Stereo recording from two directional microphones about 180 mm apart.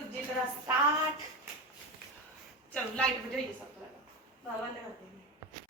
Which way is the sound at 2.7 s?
5° left (ahead or behind).